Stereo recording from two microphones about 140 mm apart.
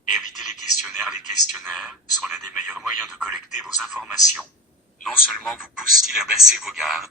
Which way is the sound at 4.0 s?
20° right (ahead or behind).